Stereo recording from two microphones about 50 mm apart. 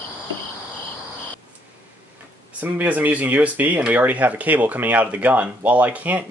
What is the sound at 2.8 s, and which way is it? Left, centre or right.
Speech, right.